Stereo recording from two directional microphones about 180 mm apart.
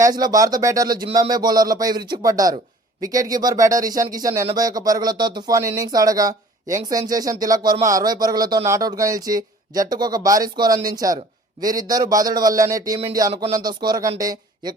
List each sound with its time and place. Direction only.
0.0 s speech: 20° right (ahead or behind)